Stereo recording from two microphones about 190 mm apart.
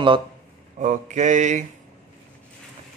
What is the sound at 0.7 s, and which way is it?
Speech, 40° right (ahead or behind).